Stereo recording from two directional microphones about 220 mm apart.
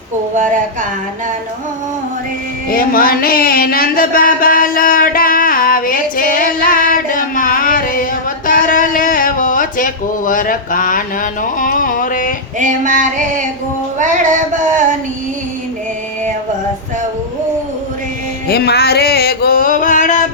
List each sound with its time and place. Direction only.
0.3 s female singing: 35° right (ahead or behind)
2.6 s a sound: 40° left (ahead or behind)
12.5 s female singing: 35° right (ahead or behind)
14.6 s female singing: 35° right (ahead or behind)
18.4 s music: 45° left (ahead or behind)